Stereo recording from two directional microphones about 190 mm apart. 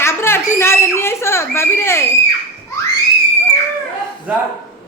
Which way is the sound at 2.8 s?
15° left (ahead or behind).